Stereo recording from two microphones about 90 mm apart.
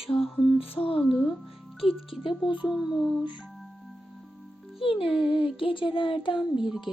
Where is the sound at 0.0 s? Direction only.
90° left.